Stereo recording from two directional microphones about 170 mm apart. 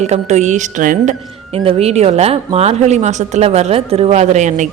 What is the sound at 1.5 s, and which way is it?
A woman's voice, 35° right (ahead or behind).